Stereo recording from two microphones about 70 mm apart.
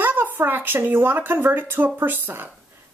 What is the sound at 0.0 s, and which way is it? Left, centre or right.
A woman's voice, right.